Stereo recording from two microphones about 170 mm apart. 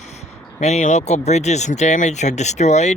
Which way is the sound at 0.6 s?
40° left (ahead or behind).